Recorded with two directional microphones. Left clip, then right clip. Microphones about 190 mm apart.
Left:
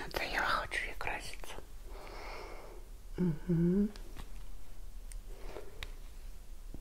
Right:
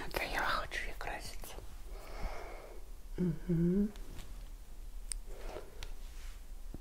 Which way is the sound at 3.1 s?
10° left (ahead or behind).